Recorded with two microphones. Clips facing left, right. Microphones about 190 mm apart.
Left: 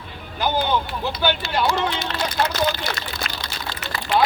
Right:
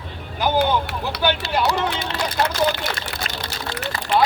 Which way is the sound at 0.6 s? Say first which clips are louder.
Right 2 dB; 75° right (ahead or behind).